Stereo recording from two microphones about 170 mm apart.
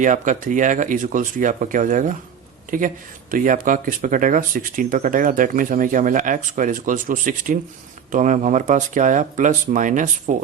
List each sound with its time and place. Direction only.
0.0 s speech: 50° right (ahead or behind)